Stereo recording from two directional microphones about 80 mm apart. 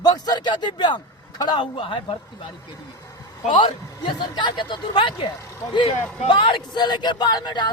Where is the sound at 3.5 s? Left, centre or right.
Left.